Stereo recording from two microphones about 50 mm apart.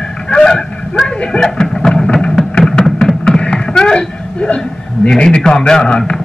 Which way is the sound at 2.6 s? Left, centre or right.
Centre.